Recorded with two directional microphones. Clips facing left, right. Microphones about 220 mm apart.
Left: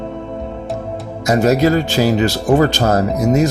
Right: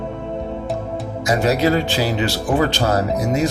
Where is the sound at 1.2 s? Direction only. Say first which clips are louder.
Left 4 dB; 45° left (ahead or behind).